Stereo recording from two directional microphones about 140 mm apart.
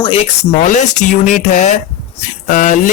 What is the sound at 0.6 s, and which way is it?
Speech, 65° left (ahead or behind).